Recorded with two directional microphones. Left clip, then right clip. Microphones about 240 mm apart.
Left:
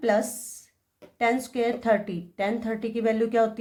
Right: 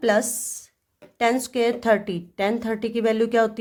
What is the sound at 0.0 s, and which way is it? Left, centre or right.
A woman's voice, right.